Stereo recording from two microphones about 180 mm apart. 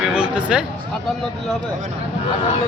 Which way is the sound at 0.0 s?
5° right (ahead or behind).